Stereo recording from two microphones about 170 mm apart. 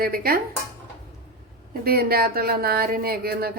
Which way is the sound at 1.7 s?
65° right (ahead or behind).